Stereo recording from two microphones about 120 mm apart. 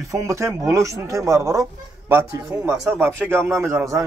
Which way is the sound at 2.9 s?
20° right (ahead or behind).